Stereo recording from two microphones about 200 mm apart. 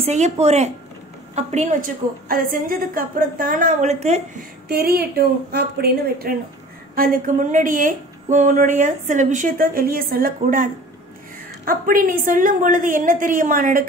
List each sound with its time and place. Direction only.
0.0 s a woman's voice: 35° right (ahead or behind)
4.6 s a woman's voice: 50° right (ahead or behind)